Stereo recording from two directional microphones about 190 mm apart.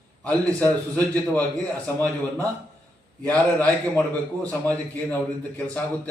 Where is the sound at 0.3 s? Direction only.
5° left (ahead or behind).